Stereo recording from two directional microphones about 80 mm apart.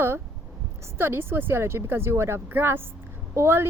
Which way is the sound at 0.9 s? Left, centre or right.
Right.